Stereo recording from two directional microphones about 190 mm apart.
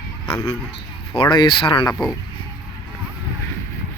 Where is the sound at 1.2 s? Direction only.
25° left (ahead or behind).